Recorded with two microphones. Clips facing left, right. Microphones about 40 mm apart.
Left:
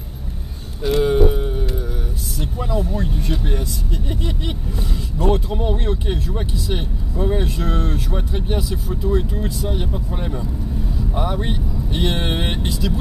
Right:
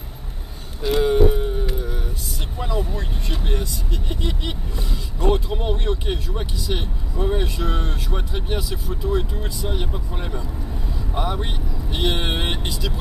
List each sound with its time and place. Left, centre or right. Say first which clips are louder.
0.8 s a sound: left 1 dB; centre
2.5 s vehicle: left 2 dB; centre
3.0 s speech: left 6 dB; centre